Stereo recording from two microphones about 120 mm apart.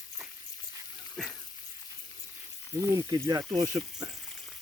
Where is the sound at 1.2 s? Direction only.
5° left (ahead or behind).